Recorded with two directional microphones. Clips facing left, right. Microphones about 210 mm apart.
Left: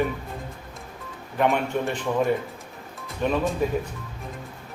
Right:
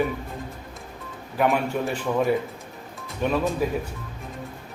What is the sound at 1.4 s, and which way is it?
Speech, 5° right (ahead or behind).